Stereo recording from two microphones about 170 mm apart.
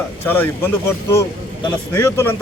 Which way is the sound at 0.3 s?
10° left (ahead or behind).